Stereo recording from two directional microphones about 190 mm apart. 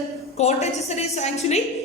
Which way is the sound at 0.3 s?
35° left (ahead or behind).